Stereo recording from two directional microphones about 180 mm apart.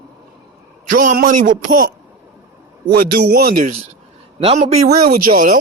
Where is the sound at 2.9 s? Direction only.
60° right (ahead or behind).